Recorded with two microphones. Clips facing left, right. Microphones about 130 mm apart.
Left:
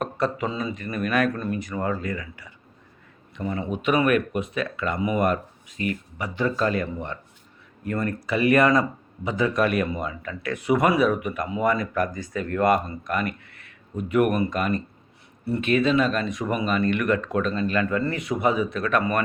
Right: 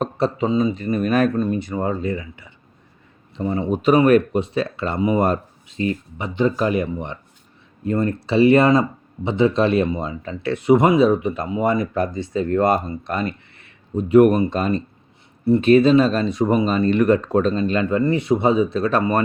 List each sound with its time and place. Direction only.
0.0 s speech: 25° right (ahead or behind)